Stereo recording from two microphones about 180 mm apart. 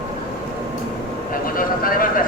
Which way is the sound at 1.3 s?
50° left (ahead or behind).